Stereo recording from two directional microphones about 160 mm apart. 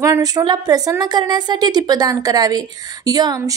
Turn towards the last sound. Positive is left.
turn(degrees=-25)  # may be behind; listen again after turning